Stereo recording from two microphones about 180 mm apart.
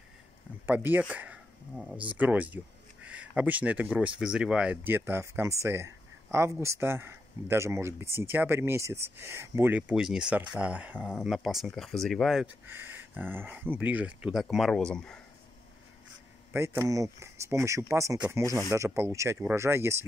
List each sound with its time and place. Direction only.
0.7 s speech: 10° right (ahead or behind)
16.5 s speech: 15° right (ahead or behind)